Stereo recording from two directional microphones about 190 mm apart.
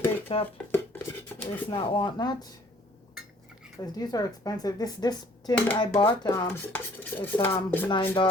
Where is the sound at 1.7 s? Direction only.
25° left (ahead or behind).